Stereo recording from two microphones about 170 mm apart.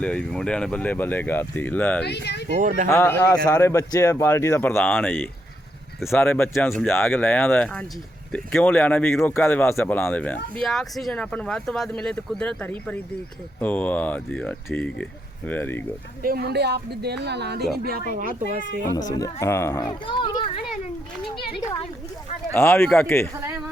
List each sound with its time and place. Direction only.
0.0 s speech: 5° left (ahead or behind)
2.0 s speech: 80° left
2.6 s a child's voice: 50° right (ahead or behind)
2.8 s speech: 15° left (ahead or behind)
16.2 s speech: 65° right (ahead or behind)
18.1 s a child's voice: 55° right (ahead or behind)
19.1 s a child's voice: 20° left (ahead or behind)
22.5 s speech: 15° left (ahead or behind)
23.3 s speech: 15° right (ahead or behind)